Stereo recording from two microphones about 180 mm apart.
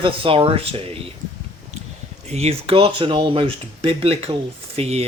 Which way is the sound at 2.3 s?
35° right (ahead or behind).